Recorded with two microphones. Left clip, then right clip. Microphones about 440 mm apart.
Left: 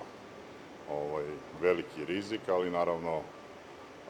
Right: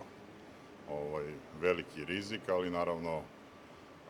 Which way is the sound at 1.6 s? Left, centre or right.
Right.